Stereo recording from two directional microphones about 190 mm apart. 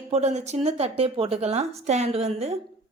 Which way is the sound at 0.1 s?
35° right (ahead or behind).